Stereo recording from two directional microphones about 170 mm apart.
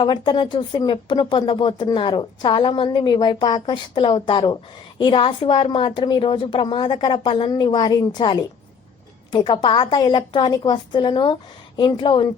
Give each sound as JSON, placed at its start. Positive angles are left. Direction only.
{"t": 0.0, "sound": "speech", "side_deg": 25}